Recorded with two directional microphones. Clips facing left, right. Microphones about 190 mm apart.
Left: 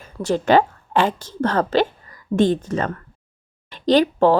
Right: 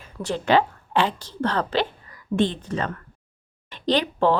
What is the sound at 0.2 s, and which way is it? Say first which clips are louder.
Speech: left 4 dB; 45° left (ahead or behind).